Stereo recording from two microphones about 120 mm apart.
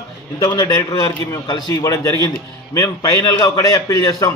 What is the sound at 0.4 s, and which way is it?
A man's voice, 30° left (ahead or behind).